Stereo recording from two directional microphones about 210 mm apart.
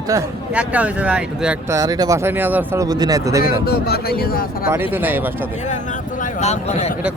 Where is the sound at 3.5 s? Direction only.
45° left (ahead or behind).